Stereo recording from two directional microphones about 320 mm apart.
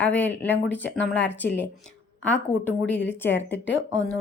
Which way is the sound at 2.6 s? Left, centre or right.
Centre.